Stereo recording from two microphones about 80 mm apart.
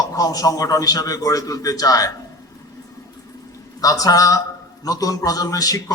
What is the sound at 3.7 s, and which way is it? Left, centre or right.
A man's voice, left.